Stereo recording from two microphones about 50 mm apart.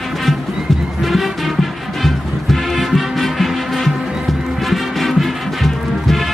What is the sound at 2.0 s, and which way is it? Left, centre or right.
Music, centre.